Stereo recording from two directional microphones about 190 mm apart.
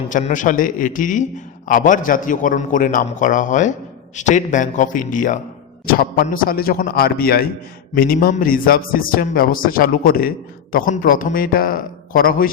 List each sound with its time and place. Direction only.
0.1 s a man's voice: 40° left (ahead or behind)